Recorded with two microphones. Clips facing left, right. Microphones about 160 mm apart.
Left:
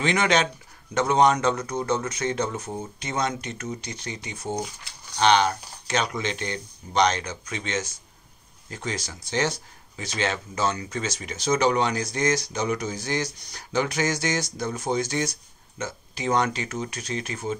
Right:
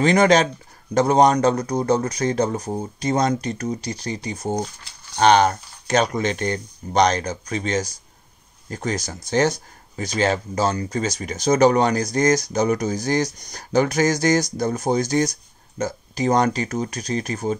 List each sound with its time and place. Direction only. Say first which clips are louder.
0.0 s speech: right 7 dB; 40° right (ahead or behind)